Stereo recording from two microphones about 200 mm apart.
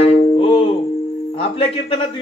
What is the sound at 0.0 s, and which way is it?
Music, 30° left (ahead or behind).